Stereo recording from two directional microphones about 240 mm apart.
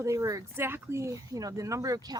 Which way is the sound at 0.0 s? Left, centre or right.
Centre.